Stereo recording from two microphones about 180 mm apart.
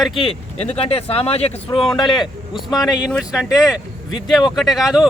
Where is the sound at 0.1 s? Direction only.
30° left (ahead or behind).